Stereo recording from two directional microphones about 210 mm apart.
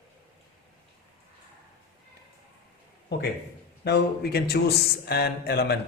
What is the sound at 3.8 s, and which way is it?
A man's voice, 50° left (ahead or behind).